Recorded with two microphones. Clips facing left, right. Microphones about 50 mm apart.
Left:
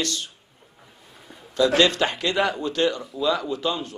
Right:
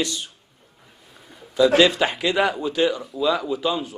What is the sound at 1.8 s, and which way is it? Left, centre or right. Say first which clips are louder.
A man's voice: right 2 dB; centre.